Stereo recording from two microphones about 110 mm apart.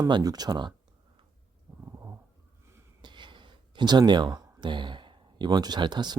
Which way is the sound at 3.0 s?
45° right (ahead or behind).